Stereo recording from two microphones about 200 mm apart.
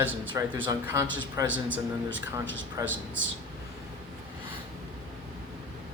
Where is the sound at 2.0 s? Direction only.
65° right (ahead or behind).